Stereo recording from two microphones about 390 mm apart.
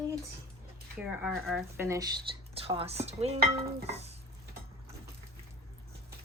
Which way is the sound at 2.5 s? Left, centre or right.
Centre.